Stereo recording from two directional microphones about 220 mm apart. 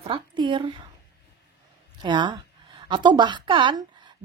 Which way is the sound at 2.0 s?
20° right (ahead or behind).